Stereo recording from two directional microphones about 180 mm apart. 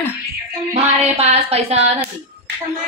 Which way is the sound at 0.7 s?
35° right (ahead or behind).